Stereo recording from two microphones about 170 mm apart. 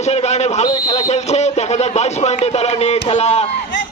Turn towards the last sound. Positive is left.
turn(degrees=40)  # may be behind; listen again after turning